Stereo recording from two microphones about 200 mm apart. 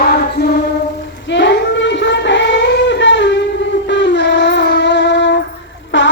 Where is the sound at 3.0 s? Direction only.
65° left (ahead or behind).